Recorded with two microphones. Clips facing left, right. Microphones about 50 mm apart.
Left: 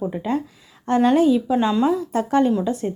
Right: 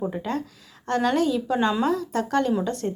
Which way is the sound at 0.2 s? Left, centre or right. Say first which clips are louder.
Left 5 dB; centre.